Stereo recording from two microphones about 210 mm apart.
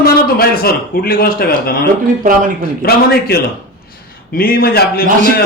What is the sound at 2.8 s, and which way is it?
A man's voice, 45° left (ahead or behind).